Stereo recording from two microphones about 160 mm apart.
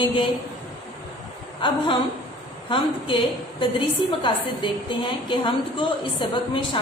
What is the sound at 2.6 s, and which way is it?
A woman's voice, 30° left (ahead or behind).